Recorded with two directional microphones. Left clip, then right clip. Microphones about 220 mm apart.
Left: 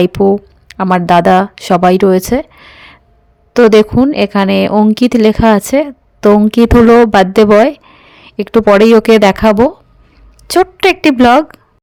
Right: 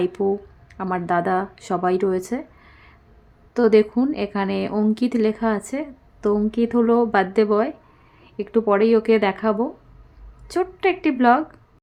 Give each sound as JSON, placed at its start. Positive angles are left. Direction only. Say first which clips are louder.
{"t": 0.0, "sound": "a woman's voice", "louder": "left 12 dB", "side_deg": 50}